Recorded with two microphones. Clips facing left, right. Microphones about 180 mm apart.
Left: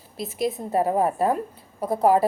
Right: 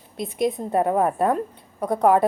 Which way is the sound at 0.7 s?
55° right (ahead or behind).